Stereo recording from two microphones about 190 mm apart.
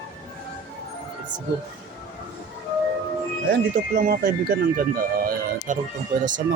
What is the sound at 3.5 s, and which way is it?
Speech, 55° right (ahead or behind).